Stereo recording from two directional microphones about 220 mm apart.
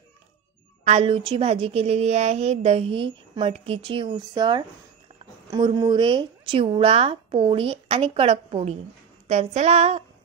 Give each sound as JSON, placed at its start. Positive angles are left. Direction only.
{"t": 0.8, "sound": "a woman's voice", "side_deg": -25}